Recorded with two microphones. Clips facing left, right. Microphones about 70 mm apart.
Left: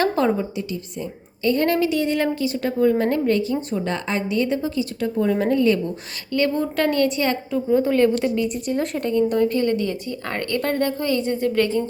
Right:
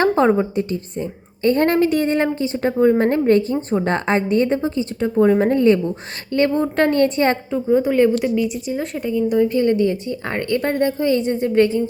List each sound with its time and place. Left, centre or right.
0.0 s speech: right
2.1 s speech: right
7.7 s speech: centre
8.6 s speech: centre
9.5 s a woman's voice: right